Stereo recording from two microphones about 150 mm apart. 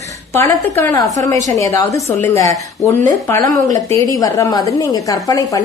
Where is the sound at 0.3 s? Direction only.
15° left (ahead or behind).